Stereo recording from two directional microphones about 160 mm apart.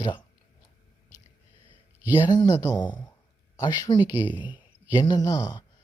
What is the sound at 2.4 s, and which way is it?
Speech, 20° left (ahead or behind).